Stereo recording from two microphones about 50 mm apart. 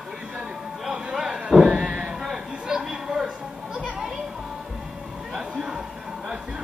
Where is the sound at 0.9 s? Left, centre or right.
Centre.